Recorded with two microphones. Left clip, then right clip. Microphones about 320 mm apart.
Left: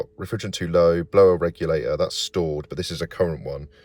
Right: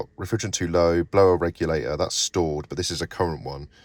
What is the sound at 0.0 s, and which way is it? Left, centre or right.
Speech, centre.